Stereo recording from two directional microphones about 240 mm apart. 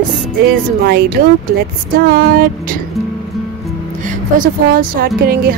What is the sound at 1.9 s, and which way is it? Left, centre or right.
Speech, right.